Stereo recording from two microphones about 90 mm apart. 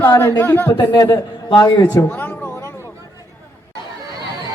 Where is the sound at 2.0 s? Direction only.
35° left (ahead or behind).